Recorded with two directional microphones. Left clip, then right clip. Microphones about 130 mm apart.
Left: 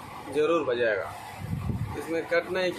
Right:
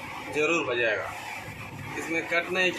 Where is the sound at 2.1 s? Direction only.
15° left (ahead or behind).